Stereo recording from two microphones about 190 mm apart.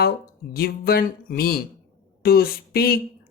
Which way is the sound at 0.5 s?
55° left (ahead or behind).